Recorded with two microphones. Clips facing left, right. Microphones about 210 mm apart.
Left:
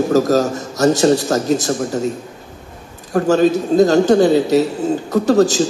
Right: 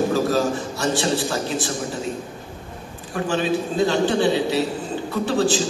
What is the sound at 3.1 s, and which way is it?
A man's voice, 40° left (ahead or behind).